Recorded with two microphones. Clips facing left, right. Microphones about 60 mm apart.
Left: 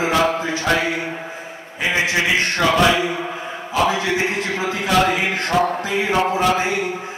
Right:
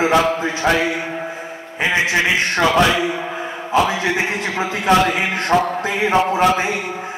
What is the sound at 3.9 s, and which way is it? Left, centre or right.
Speech, right.